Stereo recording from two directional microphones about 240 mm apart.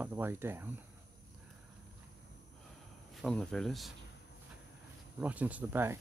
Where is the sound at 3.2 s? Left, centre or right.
Centre.